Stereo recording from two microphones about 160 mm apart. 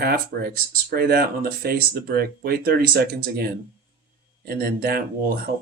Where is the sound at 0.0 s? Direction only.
70° right (ahead or behind).